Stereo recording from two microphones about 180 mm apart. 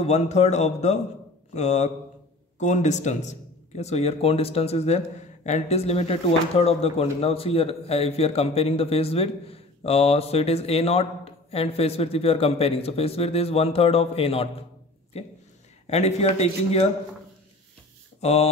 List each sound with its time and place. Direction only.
0.0 s speech: 35° left (ahead or behind)
18.2 s speech: 35° left (ahead or behind)